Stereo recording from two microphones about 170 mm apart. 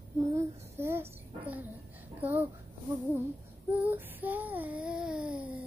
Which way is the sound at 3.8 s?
10° right (ahead or behind).